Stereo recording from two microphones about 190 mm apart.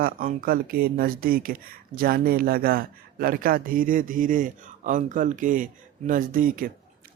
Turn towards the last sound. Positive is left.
turn(degrees=-45)  # may be behind; listen again after turning